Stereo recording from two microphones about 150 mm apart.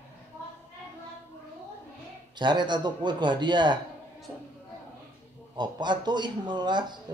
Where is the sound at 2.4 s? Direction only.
30° right (ahead or behind).